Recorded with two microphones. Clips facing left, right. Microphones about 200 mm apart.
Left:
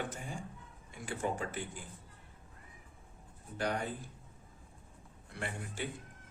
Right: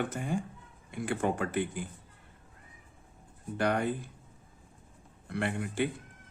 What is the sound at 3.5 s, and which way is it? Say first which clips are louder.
Speech: right 6 dB; 65° right (ahead or behind).